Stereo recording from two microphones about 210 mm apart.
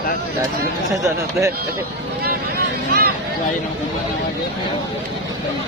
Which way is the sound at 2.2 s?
45° right (ahead or behind).